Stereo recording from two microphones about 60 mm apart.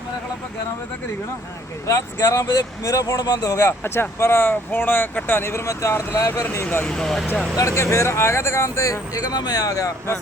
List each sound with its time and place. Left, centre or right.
1.9 s speech: left
3.7 s speech: left
5.6 s speech: left
6.8 s speech: centre
7.5 s speech: left